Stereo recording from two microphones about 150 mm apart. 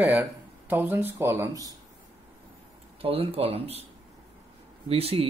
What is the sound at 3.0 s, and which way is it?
Speech, 40° right (ahead or behind).